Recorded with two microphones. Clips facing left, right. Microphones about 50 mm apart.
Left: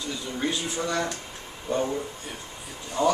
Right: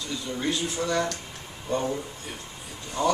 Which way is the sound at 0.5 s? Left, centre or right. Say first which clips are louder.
Right 2 dB; centre.